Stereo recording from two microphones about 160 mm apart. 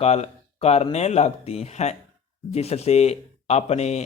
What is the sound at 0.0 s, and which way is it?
Speech, 40° left (ahead or behind).